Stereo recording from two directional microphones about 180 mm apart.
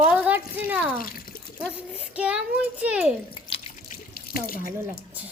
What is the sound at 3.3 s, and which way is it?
Drip, 30° left (ahead or behind).